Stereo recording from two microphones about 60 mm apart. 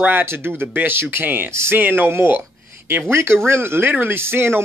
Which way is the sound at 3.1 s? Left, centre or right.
Right.